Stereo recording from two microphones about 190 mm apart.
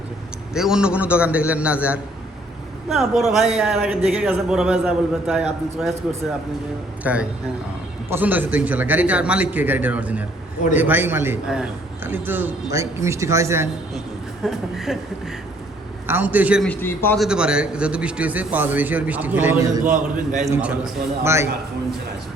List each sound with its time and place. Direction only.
0.5 s a man's voice: 5° right (ahead or behind)
7.0 s a man's voice: 5° right (ahead or behind)
14.4 s a man's voice: centre (ahead or behind)
16.0 s a man's voice: 10° right (ahead or behind)
16.6 s a man's voice: 10° left (ahead or behind)
17.2 s a man's voice: 5° right (ahead or behind)
19.8 s a man's voice: 45° right (ahead or behind)
20.5 s a man's voice: 5° right (ahead or behind)